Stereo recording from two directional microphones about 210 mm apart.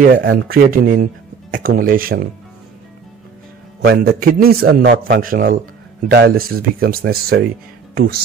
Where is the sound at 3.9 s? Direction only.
45° right (ahead or behind).